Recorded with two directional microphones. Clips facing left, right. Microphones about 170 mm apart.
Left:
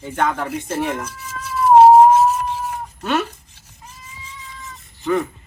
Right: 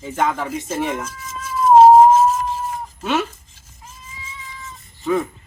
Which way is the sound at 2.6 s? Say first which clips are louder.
Even; centre (ahead or behind).